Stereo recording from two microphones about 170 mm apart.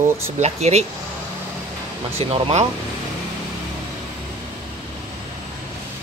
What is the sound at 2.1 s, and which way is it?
Speech, 35° right (ahead or behind).